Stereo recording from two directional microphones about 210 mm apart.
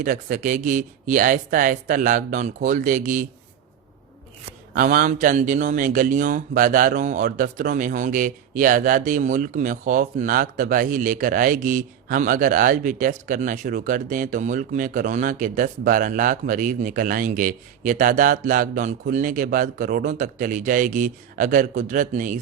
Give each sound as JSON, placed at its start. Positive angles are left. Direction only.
{"t": 0.0, "sound": "speech", "side_deg": -40}
{"t": 4.7, "sound": "speech", "side_deg": -45}